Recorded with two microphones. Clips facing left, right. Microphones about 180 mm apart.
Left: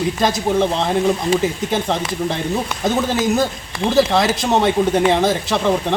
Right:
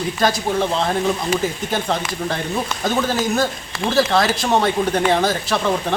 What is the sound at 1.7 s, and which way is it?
Speech, 20° left (ahead or behind).